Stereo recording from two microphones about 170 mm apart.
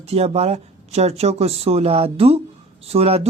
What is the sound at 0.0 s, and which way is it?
Speech, 35° right (ahead or behind).